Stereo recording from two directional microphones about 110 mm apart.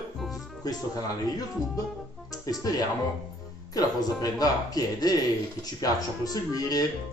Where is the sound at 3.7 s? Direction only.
35° left (ahead or behind).